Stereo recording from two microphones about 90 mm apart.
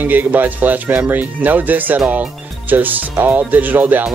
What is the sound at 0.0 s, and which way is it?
Speech, 20° right (ahead or behind).